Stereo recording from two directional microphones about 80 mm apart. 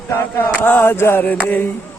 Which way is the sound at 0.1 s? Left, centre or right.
Left.